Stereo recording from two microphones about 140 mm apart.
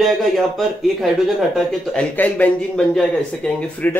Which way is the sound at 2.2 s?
10° left (ahead or behind).